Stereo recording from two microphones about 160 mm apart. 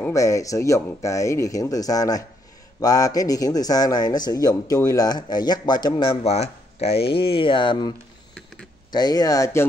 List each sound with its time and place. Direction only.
0.1 s a man's voice: 20° left (ahead or behind)
6.2 s speech: 40° left (ahead or behind)
8.9 s a man's voice: 25° left (ahead or behind)